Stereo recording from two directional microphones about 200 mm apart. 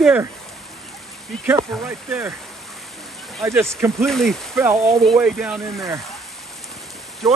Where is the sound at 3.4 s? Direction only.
15° right (ahead or behind).